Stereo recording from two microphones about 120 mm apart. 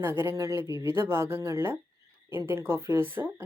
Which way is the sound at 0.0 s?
20° right (ahead or behind).